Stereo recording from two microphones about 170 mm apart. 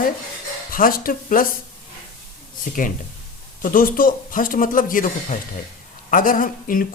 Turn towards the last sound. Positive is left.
turn(degrees=55)  # may be behind; listen again after turning